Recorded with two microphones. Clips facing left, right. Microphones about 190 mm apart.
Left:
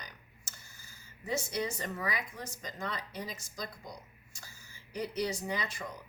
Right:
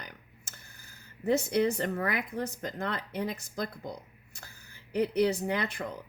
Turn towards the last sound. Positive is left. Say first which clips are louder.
# right 5 dB
turn(degrees=-60)  # may be behind; listen again after turning